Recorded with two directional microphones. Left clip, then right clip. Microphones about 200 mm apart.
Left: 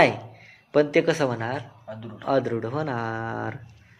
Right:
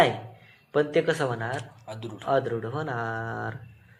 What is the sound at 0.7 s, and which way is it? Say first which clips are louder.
Speech: left 3 dB; 40° left (ahead or behind).